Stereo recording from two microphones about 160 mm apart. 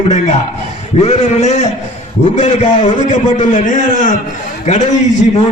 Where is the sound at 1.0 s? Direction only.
45° left (ahead or behind).